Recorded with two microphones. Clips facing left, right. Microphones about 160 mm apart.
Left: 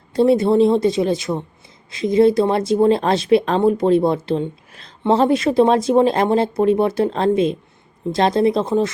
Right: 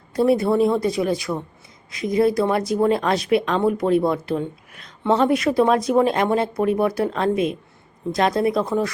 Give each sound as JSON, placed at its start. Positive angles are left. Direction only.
{"t": 0.1, "sound": "speech", "side_deg": 25}